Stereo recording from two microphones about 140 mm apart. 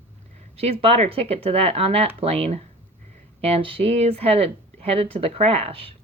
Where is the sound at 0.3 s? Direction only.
45° right (ahead or behind).